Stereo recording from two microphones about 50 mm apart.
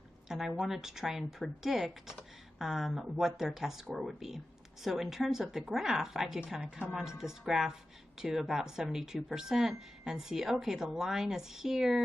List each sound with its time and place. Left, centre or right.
0.3 s a woman's voice: centre
6.6 s speech: centre
6.9 s speech: centre